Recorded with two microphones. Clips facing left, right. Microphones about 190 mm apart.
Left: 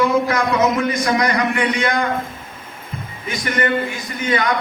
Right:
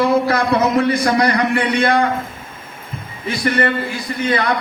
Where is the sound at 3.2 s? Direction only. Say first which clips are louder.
Right 3 dB; 30° right (ahead or behind).